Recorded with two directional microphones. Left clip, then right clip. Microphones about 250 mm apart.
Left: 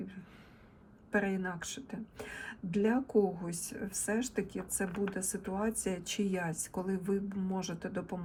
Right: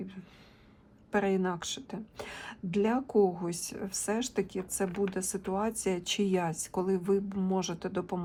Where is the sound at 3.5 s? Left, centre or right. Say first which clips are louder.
Right 4 dB; centre.